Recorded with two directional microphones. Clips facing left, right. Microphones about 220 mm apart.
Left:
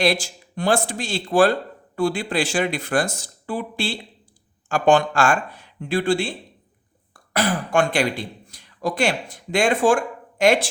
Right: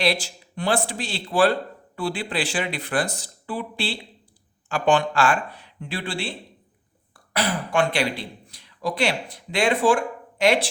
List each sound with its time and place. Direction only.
0.0 s speech: 45° left (ahead or behind)